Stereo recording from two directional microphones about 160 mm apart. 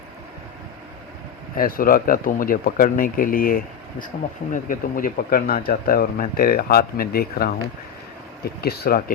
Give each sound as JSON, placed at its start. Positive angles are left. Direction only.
{"t": 1.5, "sound": "speech", "side_deg": 65}
{"t": 8.6, "sound": "speech", "side_deg": 75}